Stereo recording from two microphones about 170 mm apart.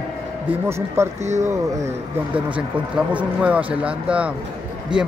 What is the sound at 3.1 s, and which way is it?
Speech, 10° right (ahead or behind).